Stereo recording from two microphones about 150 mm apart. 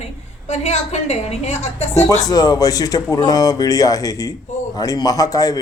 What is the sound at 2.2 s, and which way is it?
Speech, 25° left (ahead or behind).